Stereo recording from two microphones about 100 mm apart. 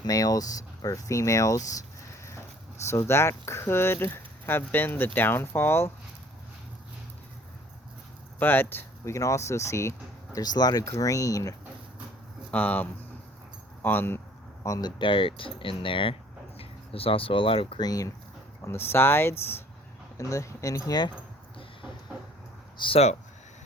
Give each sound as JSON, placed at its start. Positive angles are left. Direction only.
{"t": 0.0, "sound": "speech", "side_deg": 40}
{"t": 2.9, "sound": "speech", "side_deg": 25}
{"t": 8.4, "sound": "speech", "side_deg": 20}
{"t": 9.1, "sound": "speech", "side_deg": 30}
{"t": 10.3, "sound": "speech", "side_deg": 40}
{"t": 12.5, "sound": "speech", "side_deg": 15}
{"t": 14.6, "sound": "speech", "side_deg": 40}
{"t": 16.6, "sound": "speech", "side_deg": 70}
{"t": 17.7, "sound": "speech", "side_deg": 40}
{"t": 18.6, "sound": "speech", "side_deg": 25}
{"t": 22.8, "sound": "speech", "side_deg": 75}